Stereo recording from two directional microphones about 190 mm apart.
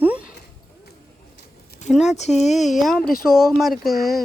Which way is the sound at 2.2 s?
35° left (ahead or behind).